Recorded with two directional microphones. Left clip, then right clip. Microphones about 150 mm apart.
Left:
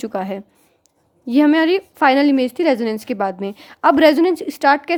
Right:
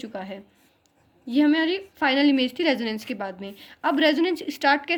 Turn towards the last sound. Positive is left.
turn(degrees=60)  # may be behind; listen again after turning